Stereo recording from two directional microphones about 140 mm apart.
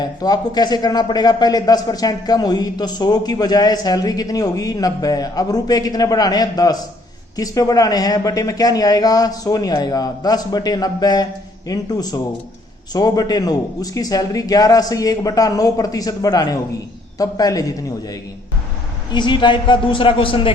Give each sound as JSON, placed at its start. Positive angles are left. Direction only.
{"t": 0.0, "sound": "speech", "side_deg": 30}
{"t": 19.1, "sound": "a man's voice", "side_deg": 35}